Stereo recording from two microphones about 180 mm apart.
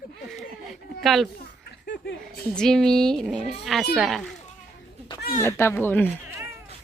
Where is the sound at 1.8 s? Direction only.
70° left (ahead or behind).